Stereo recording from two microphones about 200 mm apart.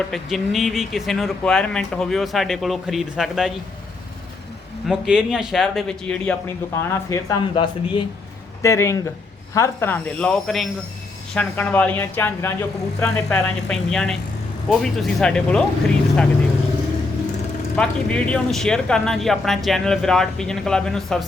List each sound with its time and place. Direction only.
0.1 s speech: centre (ahead or behind)
4.9 s speech: 5° right (ahead or behind)
6.7 s speech: 15° left (ahead or behind)
17.7 s speech: 5° left (ahead or behind)